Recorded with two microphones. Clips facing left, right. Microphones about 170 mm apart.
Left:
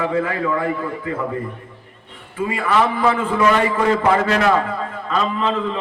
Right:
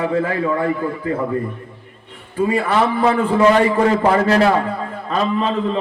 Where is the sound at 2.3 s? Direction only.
35° right (ahead or behind).